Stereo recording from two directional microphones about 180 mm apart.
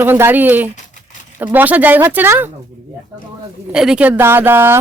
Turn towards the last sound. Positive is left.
turn(degrees=-10)  # may be behind; listen again after turning